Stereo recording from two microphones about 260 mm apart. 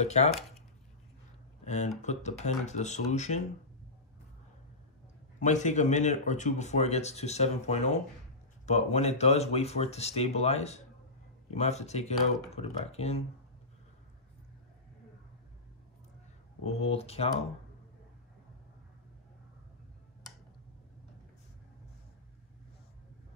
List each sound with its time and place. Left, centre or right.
0.0 s speech: left
0.3 s speech: centre
1.6 s a sound: left
2.0 s speech: left
5.4 s speech: left
16.6 s speech: left